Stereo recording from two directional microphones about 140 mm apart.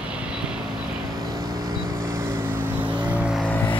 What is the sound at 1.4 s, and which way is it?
Vehicle, 90° right.